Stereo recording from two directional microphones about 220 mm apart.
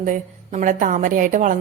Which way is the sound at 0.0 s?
35° right (ahead or behind).